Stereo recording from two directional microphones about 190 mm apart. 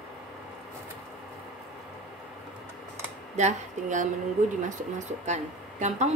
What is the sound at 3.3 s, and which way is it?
Speech, 40° right (ahead or behind).